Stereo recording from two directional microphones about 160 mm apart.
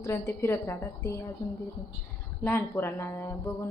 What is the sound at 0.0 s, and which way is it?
A woman's voice, 15° left (ahead or behind).